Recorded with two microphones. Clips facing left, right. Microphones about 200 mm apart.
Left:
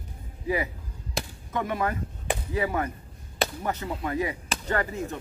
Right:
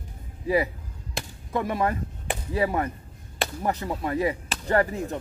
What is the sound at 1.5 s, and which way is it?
Speech, 35° right (ahead or behind).